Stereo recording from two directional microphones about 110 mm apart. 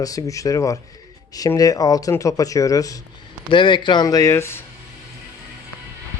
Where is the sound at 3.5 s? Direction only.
45° left (ahead or behind); by 4.6 s 25° left (ahead or behind).